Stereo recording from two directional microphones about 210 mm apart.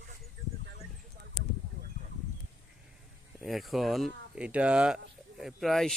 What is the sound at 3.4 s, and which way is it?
Speech, centre (ahead or behind).